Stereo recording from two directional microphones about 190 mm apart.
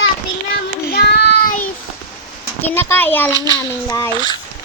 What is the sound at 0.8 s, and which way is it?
Child singing, 55° left (ahead or behind).